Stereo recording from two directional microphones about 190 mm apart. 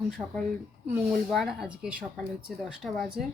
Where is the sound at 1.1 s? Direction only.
Centre (ahead or behind).